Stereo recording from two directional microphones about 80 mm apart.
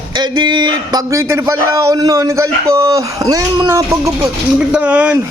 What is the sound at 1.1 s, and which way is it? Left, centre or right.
Speech, right.